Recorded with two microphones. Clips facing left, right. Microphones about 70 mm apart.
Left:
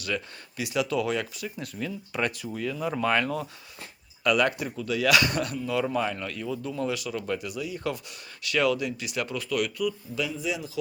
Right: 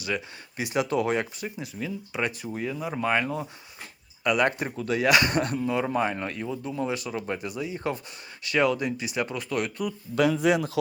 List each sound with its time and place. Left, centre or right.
0.0 s speech: right
1.5 s speech: centre
2.4 s speech: right
10.2 s speech: right